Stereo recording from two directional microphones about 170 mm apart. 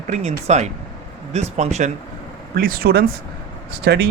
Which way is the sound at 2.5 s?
60° right (ahead or behind).